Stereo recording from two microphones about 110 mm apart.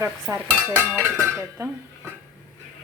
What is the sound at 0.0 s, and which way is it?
Stir, 25° right (ahead or behind).